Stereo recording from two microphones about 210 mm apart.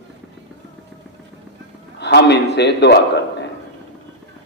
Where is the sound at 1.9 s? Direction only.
55° left (ahead or behind).